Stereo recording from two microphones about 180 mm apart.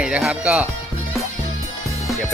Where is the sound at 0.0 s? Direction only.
5° right (ahead or behind).